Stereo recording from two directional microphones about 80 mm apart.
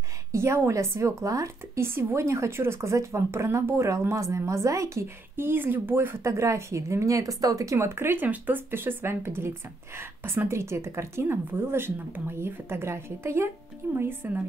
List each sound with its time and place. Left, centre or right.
0.3 s speech: right